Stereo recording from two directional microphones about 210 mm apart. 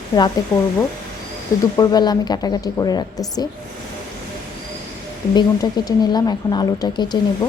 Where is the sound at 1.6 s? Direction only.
20° left (ahead or behind).